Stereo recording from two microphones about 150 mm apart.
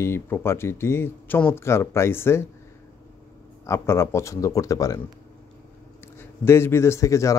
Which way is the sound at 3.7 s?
20° left (ahead or behind).